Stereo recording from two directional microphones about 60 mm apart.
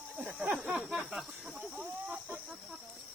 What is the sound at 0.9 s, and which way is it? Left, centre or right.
Speech, centre.